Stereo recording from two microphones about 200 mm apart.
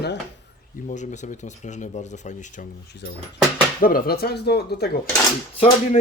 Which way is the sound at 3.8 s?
50° left (ahead or behind).